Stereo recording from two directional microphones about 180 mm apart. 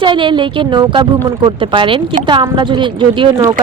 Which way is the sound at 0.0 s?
25° right (ahead or behind).